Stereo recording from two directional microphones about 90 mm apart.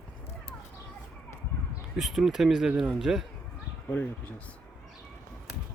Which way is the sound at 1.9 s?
5° right (ahead or behind).